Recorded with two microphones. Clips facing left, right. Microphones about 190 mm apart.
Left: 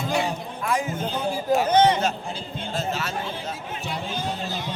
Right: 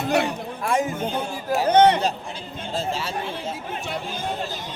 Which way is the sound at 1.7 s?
60° right (ahead or behind).